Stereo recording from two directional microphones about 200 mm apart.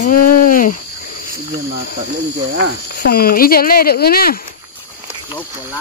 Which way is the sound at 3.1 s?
50° left (ahead or behind).